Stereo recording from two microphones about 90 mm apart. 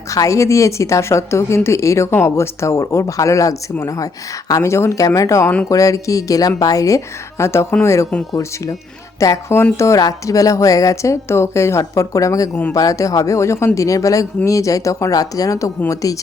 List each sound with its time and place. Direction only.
0.1 s a woman's voice: 35° left (ahead or behind)
9.1 s a woman's voice: 35° left (ahead or behind)